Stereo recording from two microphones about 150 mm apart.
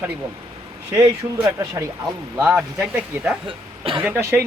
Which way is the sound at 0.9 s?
20° right (ahead or behind).